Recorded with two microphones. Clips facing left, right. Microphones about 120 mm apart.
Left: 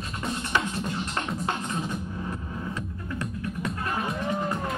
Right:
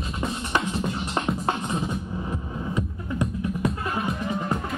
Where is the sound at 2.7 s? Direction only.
15° right (ahead or behind).